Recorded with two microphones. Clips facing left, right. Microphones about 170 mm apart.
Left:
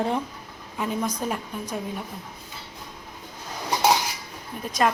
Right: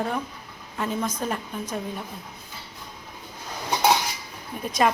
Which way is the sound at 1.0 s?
10° left (ahead or behind).